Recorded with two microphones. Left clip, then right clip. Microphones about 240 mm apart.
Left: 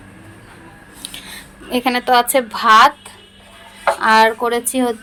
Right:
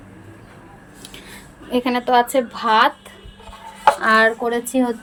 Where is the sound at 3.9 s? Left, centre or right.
Centre.